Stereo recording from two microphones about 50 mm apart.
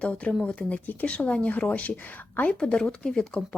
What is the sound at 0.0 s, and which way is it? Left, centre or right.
A woman's voice, left.